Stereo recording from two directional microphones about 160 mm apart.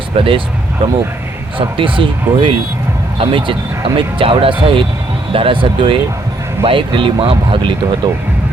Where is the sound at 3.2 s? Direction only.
30° right (ahead or behind).